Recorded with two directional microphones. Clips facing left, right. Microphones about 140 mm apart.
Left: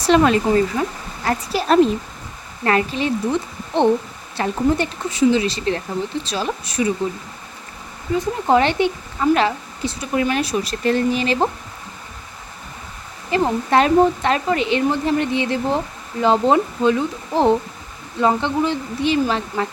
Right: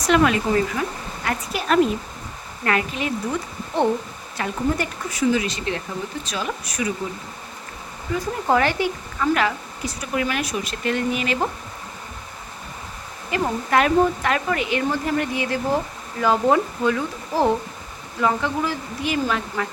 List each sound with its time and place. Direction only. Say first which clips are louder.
0.0 s speech: left 3 dB; 30° left (ahead or behind)
8.4 s speech: left 3 dB; 25° left (ahead or behind)
13.3 s speech: left 4 dB; 30° left (ahead or behind)